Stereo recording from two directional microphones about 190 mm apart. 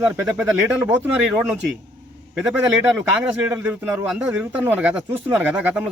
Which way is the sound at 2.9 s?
5° right (ahead or behind).